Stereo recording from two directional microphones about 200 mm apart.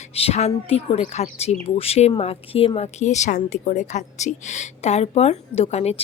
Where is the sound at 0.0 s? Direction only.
30° left (ahead or behind).